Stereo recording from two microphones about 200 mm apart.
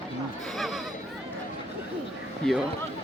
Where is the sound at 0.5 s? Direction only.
Centre (ahead or behind).